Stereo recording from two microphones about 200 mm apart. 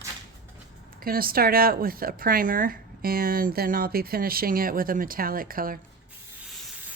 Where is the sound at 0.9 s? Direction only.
45° right (ahead or behind).